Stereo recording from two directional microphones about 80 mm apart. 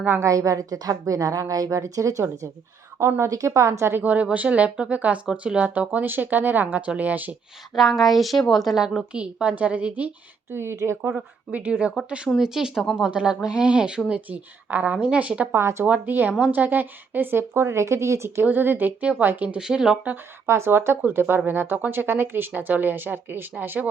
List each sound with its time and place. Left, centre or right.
0.2 s a woman's voice: right
4.0 s speech: centre
7.8 s a woman's voice: centre
9.1 s speech: centre
10.5 s a woman's voice: right
11.1 s speech: centre
15.5 s a woman's voice: right
18.4 s speech: right
19.5 s speech: centre
20.5 s speech: right